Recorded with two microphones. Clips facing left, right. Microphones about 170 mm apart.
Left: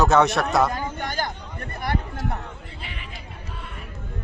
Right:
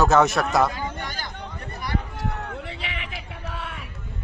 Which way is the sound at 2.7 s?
90° right.